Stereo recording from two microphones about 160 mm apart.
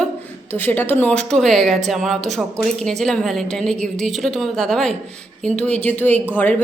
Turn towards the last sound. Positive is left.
turn(degrees=10)  # may be behind; listen again after turning